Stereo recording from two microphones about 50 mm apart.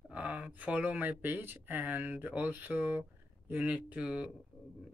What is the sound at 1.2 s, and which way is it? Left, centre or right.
Speech, right.